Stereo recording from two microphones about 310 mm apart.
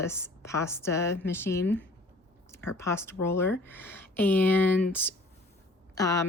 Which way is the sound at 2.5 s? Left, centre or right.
Centre.